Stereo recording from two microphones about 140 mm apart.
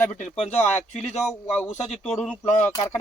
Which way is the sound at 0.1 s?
55° left (ahead or behind).